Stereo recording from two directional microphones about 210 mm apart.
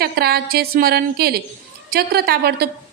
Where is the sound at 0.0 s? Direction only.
50° right (ahead or behind).